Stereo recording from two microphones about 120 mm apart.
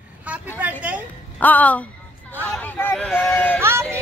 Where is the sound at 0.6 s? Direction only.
10° right (ahead or behind).